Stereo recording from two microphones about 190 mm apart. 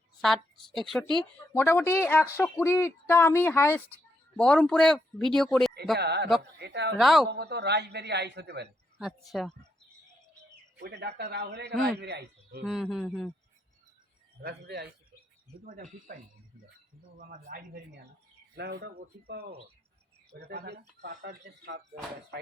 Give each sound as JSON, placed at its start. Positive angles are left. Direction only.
{"t": 0.2, "sound": "a woman's voice", "side_deg": 0}
{"t": 6.0, "sound": "speech", "side_deg": -60}
{"t": 7.0, "sound": "a woman's voice", "side_deg": 0}
{"t": 7.3, "sound": "speech", "side_deg": -65}
{"t": 9.0, "sound": "a woman's voice", "side_deg": 0}
{"t": 10.8, "sound": "a man's voice", "side_deg": -60}
{"t": 12.6, "sound": "a woman's voice", "side_deg": 0}
{"t": 14.4, "sound": "speech", "side_deg": -60}
{"t": 15.6, "sound": "speech", "side_deg": -45}
{"t": 17.2, "sound": "speech", "side_deg": -45}